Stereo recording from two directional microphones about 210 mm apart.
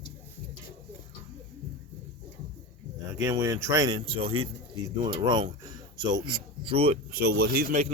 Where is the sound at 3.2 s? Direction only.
15° right (ahead or behind).